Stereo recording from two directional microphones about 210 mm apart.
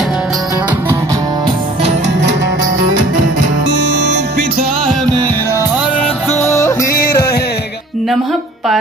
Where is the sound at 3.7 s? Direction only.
60° right (ahead or behind).